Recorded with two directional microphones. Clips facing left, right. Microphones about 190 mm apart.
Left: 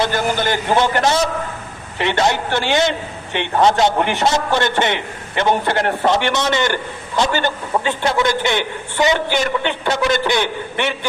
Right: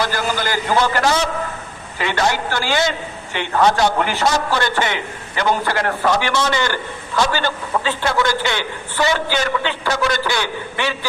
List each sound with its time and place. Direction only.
0.0 s a man's voice: 25° left (ahead or behind)